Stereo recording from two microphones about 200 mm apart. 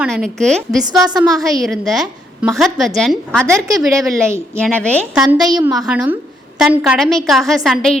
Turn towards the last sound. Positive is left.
turn(degrees=0)  # may be behind; listen again after turning